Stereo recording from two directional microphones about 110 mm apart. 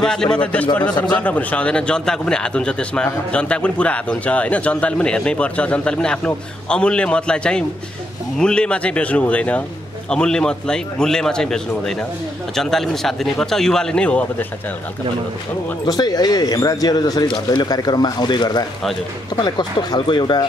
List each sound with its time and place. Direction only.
0.0 s a man's voice: 5° left (ahead or behind)
15.8 s speech: 35° left (ahead or behind)